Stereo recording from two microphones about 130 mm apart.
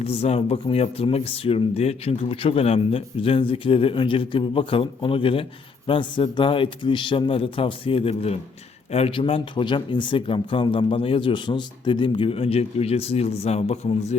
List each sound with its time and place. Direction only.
0.0 s speech: 50° left (ahead or behind)